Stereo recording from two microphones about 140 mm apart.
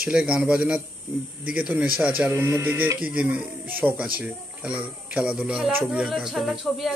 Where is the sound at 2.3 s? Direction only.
20° right (ahead or behind).